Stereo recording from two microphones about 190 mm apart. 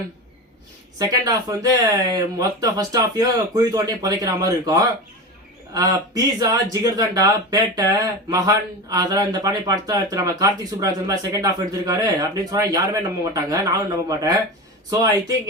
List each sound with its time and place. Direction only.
0.9 s speech: 20° right (ahead or behind)